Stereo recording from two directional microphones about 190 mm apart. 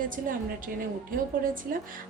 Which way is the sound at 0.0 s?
45° right (ahead or behind).